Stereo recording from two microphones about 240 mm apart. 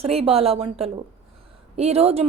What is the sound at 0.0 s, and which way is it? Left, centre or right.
A woman's voice, right.